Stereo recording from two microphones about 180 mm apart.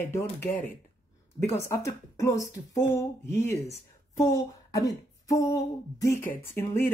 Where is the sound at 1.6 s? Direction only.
15° left (ahead or behind).